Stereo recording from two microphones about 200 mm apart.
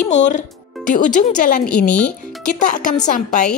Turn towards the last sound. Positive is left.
turn(degrees=40)  # may be behind; listen again after turning